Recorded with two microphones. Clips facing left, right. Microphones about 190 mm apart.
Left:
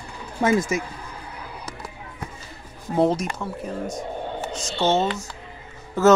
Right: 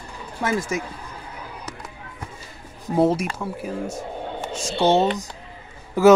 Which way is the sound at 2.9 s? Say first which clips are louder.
Right 1 dB; 5° right (ahead or behind).